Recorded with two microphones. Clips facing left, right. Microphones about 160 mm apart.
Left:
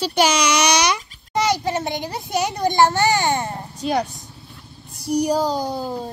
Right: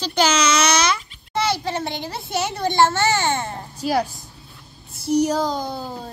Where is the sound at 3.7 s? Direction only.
5° right (ahead or behind).